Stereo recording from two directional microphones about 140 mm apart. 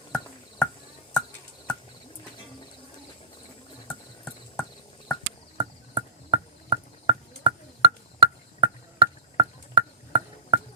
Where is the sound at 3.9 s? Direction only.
10° left (ahead or behind).